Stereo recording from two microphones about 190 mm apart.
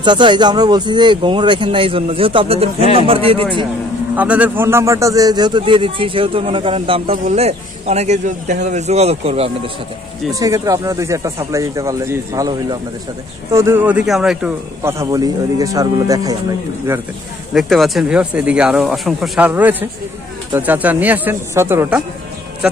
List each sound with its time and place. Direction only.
0.0 s a man's voice: 25° right (ahead or behind)
4.2 s a man's voice: 10° right (ahead or behind); by 9.5 s 35° right (ahead or behind)
10.4 s speech: 20° right (ahead or behind); by 14.5 s 5° right (ahead or behind)
14.8 s speech: 15° right (ahead or behind)
17.6 s speech: centre (ahead or behind)